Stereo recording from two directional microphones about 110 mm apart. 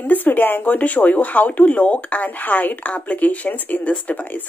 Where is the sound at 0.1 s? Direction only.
15° left (ahead or behind).